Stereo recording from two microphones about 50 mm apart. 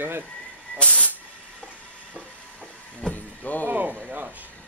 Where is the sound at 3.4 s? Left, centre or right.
Left.